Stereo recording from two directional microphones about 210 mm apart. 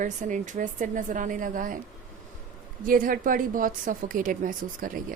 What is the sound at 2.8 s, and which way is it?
A woman's voice, 40° right (ahead or behind).